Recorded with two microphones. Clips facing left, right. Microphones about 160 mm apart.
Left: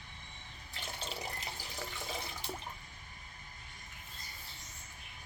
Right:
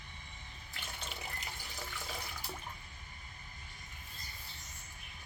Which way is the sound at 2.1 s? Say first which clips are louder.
Left 3 dB; 25° left (ahead or behind).